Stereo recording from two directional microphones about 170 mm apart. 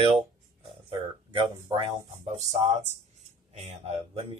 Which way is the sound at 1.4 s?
30° right (ahead or behind).